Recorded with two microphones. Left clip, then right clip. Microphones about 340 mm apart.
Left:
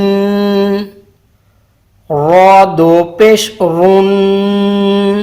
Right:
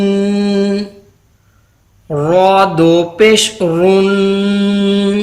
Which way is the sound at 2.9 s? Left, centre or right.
Centre.